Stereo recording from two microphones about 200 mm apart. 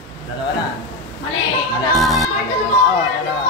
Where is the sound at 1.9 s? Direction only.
Centre (ahead or behind).